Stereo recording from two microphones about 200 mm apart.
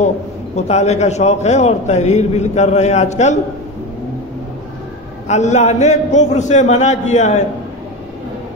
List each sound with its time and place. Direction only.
0.6 s a man's voice: 35° left (ahead or behind)
5.3 s a man's voice: 35° left (ahead or behind)